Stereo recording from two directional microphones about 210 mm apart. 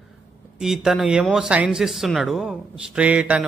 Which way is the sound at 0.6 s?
Centre (ahead or behind).